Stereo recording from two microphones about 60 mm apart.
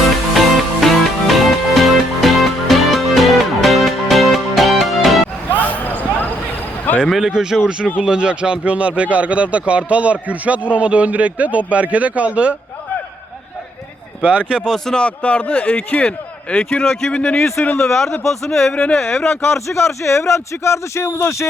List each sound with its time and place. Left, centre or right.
0.0 s music: centre
5.6 s a sound: left
7.1 s speech: centre; by 12.5 s right
14.2 s speech: centre
14.8 s a man's voice: centre
17.1 s a man's voice: centre
17.7 s speech: centre
18.7 s a man's voice: centre
19.2 s a man's voice: left